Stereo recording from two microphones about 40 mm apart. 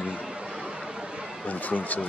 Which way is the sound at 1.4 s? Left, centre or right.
Left.